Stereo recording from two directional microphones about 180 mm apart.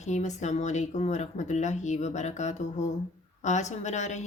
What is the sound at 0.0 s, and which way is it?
Speech, 40° left (ahead or behind).